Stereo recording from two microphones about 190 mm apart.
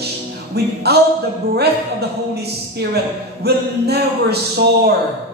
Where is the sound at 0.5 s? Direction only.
55° right (ahead or behind).